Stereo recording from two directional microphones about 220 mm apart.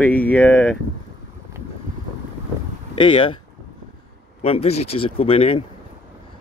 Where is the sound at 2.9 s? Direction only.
25° left (ahead or behind).